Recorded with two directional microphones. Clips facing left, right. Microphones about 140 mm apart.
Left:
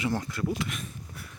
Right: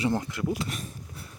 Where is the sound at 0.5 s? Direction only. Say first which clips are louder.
Even; 35° right (ahead or behind).